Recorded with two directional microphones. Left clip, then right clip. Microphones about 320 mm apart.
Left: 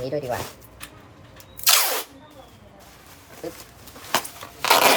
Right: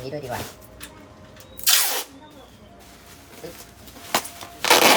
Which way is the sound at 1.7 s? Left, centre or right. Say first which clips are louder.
Left 1 dB; centre.